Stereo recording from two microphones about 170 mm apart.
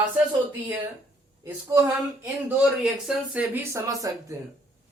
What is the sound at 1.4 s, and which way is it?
Speech, 20° right (ahead or behind).